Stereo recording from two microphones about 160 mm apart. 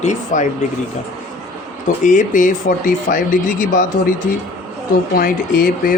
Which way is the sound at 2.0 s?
55° left (ahead or behind).